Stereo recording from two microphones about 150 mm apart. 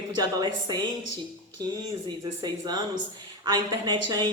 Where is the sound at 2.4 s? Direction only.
30° right (ahead or behind).